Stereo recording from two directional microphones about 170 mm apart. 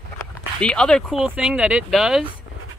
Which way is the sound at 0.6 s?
5° left (ahead or behind).